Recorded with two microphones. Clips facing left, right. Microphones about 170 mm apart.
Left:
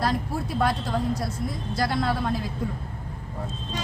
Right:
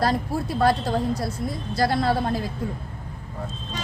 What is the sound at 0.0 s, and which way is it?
Speech, 35° right (ahead or behind).